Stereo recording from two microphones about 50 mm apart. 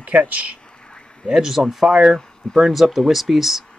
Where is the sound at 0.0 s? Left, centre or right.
Right.